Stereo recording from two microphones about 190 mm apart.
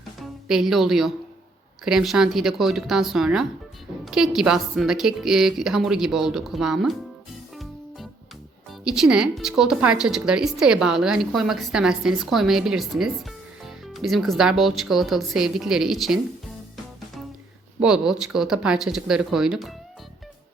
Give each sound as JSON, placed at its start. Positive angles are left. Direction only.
{"t": 0.2, "sound": "a woman's voice", "side_deg": 0}
{"t": 7.5, "sound": "music", "side_deg": 0}
{"t": 8.8, "sound": "a woman's voice", "side_deg": -5}
{"t": 17.7, "sound": "a woman's voice", "side_deg": -5}